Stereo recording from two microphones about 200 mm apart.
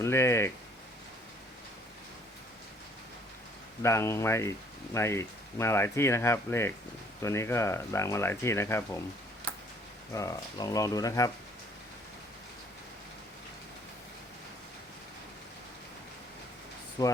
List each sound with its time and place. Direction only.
0.0 s speech: 15° left (ahead or behind)
3.8 s speech: 15° left (ahead or behind)
10.1 s speech: 15° left (ahead or behind)
17.0 s speech: 20° left (ahead or behind)